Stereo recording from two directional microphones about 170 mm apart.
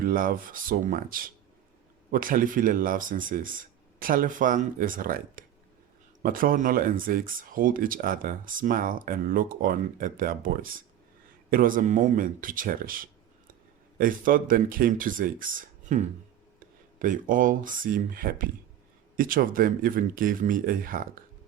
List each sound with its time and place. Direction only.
0.0 s speech: 55° right (ahead or behind)